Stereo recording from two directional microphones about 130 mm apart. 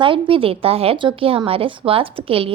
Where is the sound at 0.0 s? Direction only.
40° right (ahead or behind).